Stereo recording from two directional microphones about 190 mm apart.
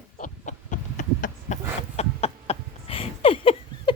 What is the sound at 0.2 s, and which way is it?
Chicken, 40° left (ahead or behind).